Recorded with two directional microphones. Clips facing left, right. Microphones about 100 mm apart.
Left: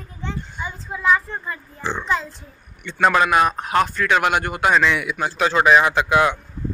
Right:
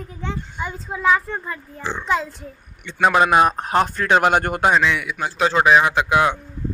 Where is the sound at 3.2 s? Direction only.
25° right (ahead or behind).